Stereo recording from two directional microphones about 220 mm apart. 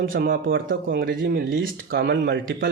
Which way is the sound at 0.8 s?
45° right (ahead or behind).